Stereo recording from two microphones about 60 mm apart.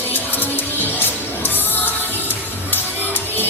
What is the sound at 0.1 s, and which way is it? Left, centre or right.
Music, left.